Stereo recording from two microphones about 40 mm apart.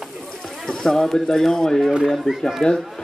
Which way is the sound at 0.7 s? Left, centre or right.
Centre.